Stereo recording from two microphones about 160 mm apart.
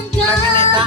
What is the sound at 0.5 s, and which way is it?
Music, 35° right (ahead or behind).